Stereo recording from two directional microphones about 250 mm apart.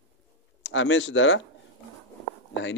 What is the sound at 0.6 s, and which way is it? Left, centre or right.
Speech, left.